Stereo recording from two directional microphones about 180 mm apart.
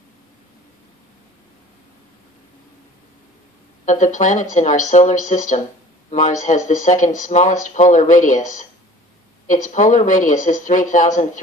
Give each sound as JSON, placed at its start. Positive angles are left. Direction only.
{"t": 3.8, "sound": "speech", "side_deg": 45}